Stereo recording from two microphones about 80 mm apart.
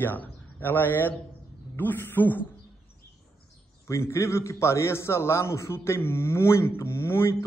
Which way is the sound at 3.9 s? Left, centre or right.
Left.